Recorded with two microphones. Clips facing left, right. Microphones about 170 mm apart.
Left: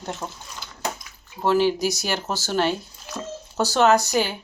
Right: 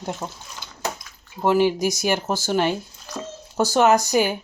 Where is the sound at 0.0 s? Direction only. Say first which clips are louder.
Right 2 dB; 10° right (ahead or behind).